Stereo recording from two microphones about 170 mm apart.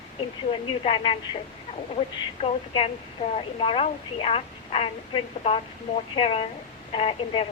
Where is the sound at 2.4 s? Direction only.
35° left (ahead or behind).